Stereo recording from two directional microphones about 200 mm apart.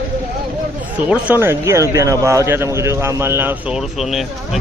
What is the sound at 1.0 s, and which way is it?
Speech, 5° right (ahead or behind).